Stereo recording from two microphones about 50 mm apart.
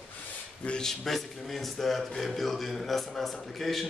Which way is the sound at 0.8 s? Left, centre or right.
Centre.